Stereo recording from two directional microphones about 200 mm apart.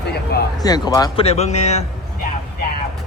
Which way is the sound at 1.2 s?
35° left (ahead or behind).